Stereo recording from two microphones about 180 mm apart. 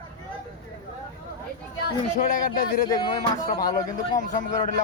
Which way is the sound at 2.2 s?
50° left (ahead or behind).